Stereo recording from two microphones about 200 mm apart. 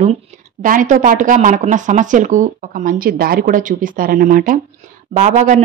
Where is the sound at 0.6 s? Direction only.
40° right (ahead or behind).